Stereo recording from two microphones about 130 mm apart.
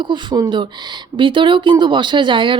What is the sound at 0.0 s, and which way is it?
Speech, 35° right (ahead or behind).